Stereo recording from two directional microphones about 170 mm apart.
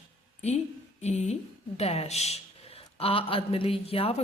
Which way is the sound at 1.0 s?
40° left (ahead or behind).